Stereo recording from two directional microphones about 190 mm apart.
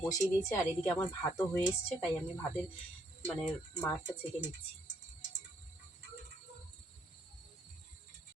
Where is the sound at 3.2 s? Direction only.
10° left (ahead or behind).